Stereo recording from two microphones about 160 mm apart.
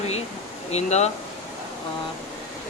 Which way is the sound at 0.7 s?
45° left (ahead or behind).